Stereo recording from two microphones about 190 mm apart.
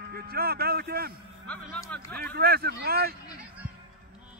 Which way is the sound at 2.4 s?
55° right (ahead or behind).